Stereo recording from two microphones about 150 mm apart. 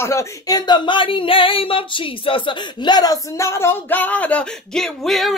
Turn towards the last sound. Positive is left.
turn(degrees=0)  # may be behind; listen again after turning